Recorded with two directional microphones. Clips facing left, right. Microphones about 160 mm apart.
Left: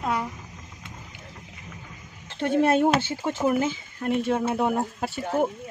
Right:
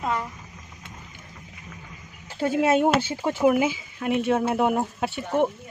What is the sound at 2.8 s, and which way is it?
Speech, 20° right (ahead or behind).